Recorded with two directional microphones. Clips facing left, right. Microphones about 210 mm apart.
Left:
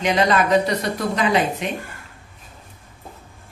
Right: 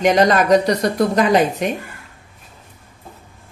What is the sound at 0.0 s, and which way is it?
Speech, 45° right (ahead or behind).